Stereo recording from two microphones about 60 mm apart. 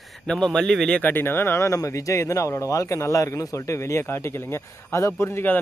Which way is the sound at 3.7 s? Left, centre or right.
Left.